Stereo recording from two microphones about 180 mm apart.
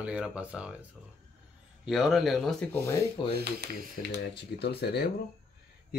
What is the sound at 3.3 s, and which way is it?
Speech, 65° right (ahead or behind).